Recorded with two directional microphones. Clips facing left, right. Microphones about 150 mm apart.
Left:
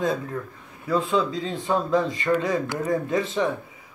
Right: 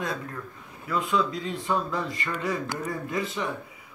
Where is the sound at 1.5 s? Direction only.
20° left (ahead or behind).